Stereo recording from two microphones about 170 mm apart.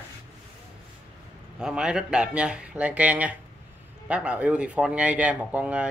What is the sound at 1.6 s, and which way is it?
Speech, 5° right (ahead or behind).